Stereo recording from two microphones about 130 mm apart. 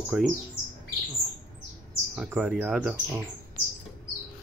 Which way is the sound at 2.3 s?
10° right (ahead or behind).